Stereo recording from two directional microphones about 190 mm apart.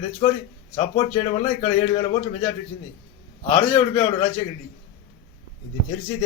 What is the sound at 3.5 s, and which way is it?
Speech, 30° left (ahead or behind).